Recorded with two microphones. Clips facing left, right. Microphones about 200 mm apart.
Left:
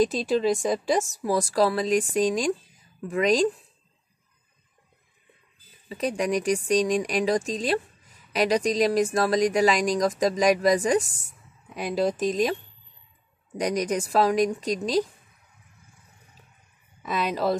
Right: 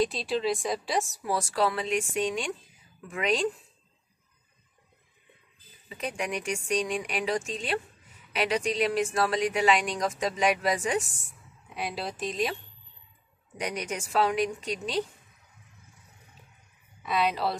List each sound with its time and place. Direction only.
0.0 s speech: 45° left (ahead or behind)
5.9 s speech: 35° left (ahead or behind)
13.6 s speech: 40° left (ahead or behind)
17.0 s speech: 45° left (ahead or behind)